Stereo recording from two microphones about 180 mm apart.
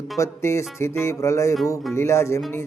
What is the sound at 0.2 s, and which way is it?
Speech, 15° left (ahead or behind).